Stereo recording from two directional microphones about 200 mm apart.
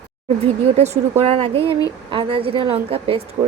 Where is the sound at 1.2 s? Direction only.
30° right (ahead or behind).